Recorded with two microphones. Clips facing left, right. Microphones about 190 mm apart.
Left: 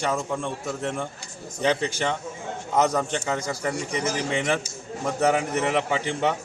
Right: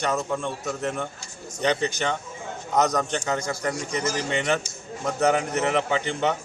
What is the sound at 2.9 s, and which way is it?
A man's voice, 5° left (ahead or behind).